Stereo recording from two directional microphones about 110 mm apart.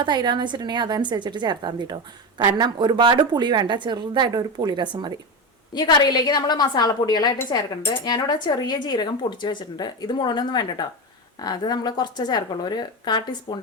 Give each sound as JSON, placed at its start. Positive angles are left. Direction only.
{"t": 0.0, "sound": "speech", "side_deg": -40}
{"t": 5.7, "sound": "speech", "side_deg": 40}